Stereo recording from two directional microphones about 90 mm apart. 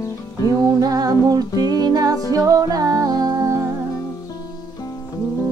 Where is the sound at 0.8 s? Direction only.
45° right (ahead or behind).